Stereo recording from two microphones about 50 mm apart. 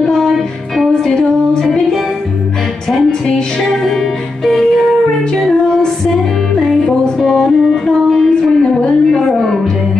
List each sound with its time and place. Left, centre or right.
0.0 s music: centre